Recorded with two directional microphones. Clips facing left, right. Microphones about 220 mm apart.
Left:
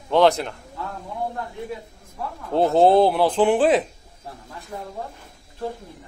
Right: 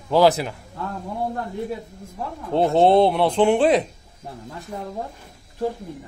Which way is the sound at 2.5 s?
Centre (ahead or behind).